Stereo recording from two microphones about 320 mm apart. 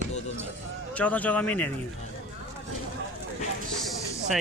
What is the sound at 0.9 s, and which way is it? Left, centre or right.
Speech, centre.